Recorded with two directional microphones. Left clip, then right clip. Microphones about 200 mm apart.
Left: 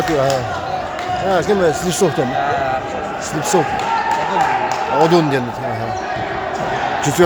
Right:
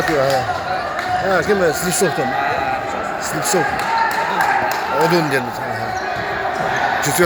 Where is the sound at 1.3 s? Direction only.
10° left (ahead or behind).